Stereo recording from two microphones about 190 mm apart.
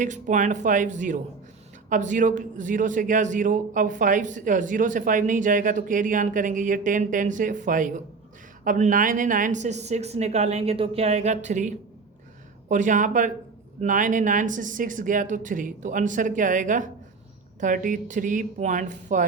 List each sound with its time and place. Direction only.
0.0 s a man's voice: 40° right (ahead or behind)